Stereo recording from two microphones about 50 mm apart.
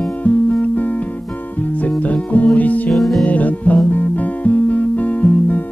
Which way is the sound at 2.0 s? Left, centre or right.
Left.